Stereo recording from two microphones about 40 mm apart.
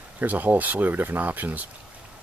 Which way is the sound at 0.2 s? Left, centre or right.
Right.